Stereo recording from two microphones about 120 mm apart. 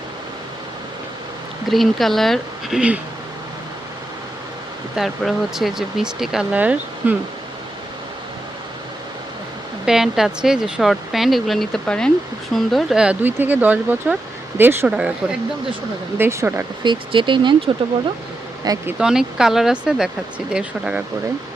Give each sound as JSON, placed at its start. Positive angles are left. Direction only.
{"t": 1.6, "sound": "speech", "side_deg": 0}
{"t": 4.9, "sound": "speech", "side_deg": 0}
{"t": 9.8, "sound": "speech", "side_deg": -5}
{"t": 14.8, "sound": "speech", "side_deg": -10}
{"t": 16.1, "sound": "speech", "side_deg": -20}
{"t": 16.8, "sound": "speech", "side_deg": -40}
{"t": 18.9, "sound": "speech", "side_deg": -5}